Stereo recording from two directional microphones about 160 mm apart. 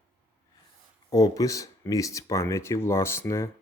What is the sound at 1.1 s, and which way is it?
Speech, 20° left (ahead or behind).